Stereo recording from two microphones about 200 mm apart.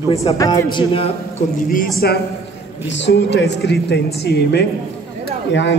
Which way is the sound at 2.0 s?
50° left (ahead or behind).